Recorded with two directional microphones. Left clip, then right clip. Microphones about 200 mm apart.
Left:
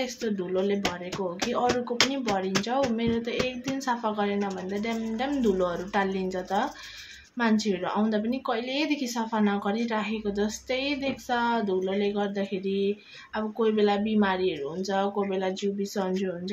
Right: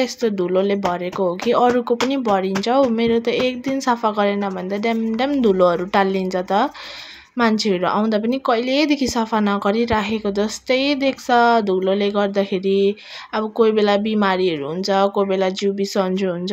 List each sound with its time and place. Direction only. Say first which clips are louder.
0.0 s a woman's voice: right 11 dB; 40° right (ahead or behind)